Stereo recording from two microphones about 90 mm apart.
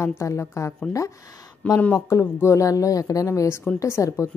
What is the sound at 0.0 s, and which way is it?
Speech, 35° left (ahead or behind).